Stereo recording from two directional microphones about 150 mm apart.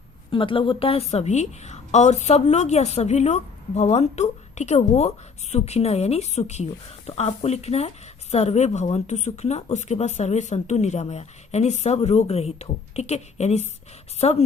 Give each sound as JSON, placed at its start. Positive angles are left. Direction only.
{"t": 0.3, "sound": "a woman's voice", "side_deg": 35}